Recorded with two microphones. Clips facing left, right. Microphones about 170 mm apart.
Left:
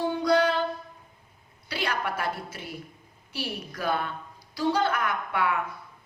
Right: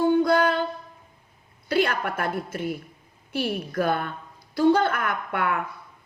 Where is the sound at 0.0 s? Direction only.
50° right (ahead or behind).